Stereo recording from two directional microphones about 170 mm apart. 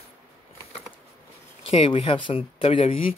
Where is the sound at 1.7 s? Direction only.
35° left (ahead or behind).